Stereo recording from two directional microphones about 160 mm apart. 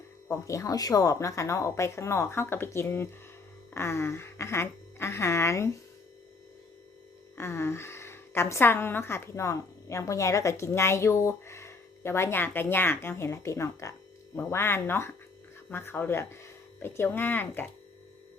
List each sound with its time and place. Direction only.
0.3 s a woman's voice: 20° left (ahead or behind)
7.3 s a woman's voice: 15° left (ahead or behind)